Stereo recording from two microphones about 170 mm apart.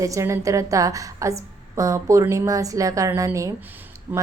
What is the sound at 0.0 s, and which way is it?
A woman's voice, 20° right (ahead or behind).